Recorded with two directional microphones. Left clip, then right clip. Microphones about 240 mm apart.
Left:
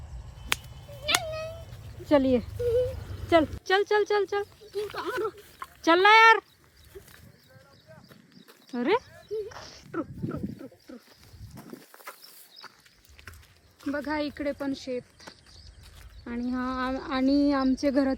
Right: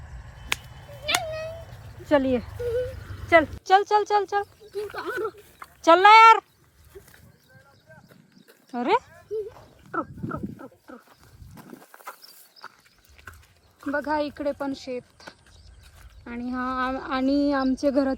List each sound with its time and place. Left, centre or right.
0.1 s cat: centre
8.4 s a sound: centre
9.5 s speech: right
9.9 s a sound: centre
11.5 s walk: centre
13.2 s pig: centre
13.8 s speech: centre